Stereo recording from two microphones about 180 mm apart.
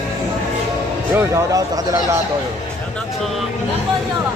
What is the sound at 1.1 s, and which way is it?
A man's voice, 15° right (ahead or behind).